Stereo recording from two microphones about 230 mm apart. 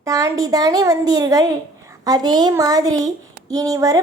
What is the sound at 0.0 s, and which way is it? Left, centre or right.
Speech, centre.